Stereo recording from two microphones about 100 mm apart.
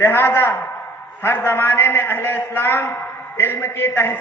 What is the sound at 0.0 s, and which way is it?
A man's voice, 20° left (ahead or behind).